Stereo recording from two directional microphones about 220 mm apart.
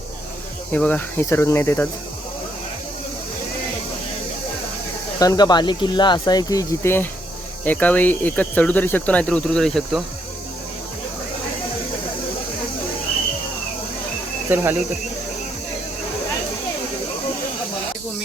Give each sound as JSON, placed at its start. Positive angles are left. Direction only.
{"t": 0.7, "sound": "speech", "side_deg": 5}
{"t": 5.2, "sound": "speech", "side_deg": 15}
{"t": 14.5, "sound": "speech", "side_deg": -10}